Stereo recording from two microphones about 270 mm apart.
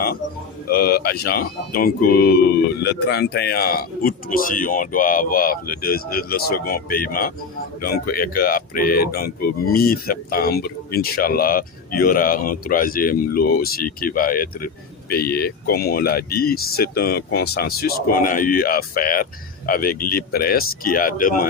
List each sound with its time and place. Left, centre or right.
0.7 s speech: left